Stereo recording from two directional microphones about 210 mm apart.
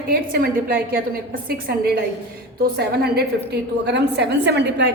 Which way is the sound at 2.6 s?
50° right (ahead or behind).